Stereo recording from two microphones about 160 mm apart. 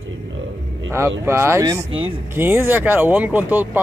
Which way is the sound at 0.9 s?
15° right (ahead or behind).